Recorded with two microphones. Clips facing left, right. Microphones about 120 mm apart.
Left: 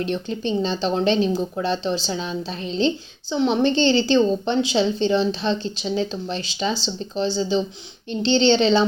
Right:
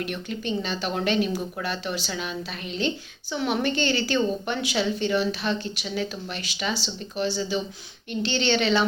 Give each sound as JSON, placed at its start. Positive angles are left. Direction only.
{"t": 0.0, "sound": "a woman's voice", "side_deg": 30}